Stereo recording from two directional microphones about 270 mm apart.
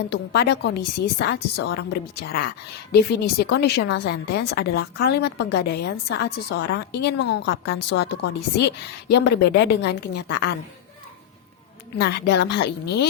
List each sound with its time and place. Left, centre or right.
0.1 s a woman's voice: left
11.9 s a woman's voice: left